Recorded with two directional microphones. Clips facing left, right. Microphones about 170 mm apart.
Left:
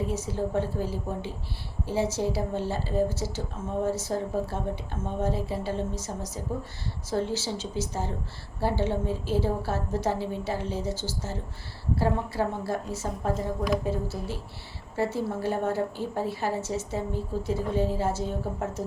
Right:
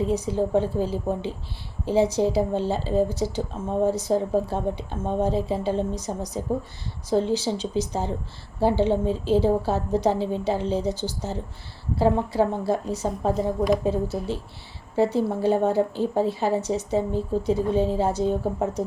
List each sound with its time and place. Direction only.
0.0 s a woman's voice: 20° right (ahead or behind)